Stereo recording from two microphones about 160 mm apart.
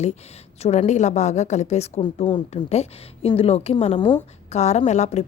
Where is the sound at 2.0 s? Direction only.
30° left (ahead or behind).